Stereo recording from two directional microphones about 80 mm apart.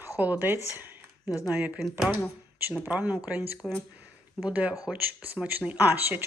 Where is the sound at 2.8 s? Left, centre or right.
Right.